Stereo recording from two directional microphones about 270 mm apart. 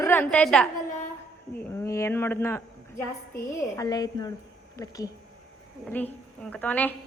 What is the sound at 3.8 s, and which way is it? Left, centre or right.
A woman's voice, centre.